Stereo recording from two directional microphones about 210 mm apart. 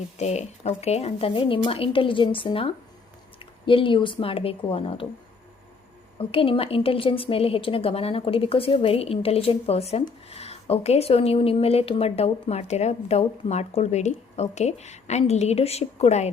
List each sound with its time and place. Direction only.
0.2 s a woman's voice: 30° left (ahead or behind)
6.1 s a woman's voice: 25° left (ahead or behind)